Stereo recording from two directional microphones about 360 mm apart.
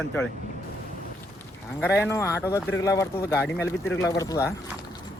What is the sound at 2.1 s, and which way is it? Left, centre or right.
Speech, centre.